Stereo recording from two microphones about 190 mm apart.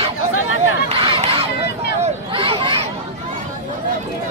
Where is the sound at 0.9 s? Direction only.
25° right (ahead or behind).